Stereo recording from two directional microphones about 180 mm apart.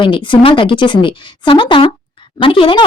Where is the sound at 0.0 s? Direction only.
25° left (ahead or behind).